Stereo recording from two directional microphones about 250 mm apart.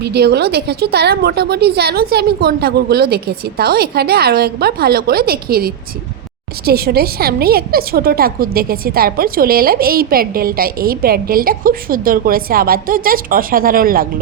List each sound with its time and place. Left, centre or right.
0.0 s a woman's voice: right